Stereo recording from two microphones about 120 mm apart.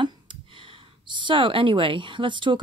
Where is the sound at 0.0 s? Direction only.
45° right (ahead or behind).